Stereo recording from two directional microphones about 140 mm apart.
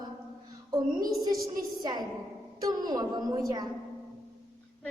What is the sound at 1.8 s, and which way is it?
A woman's voice, 30° right (ahead or behind).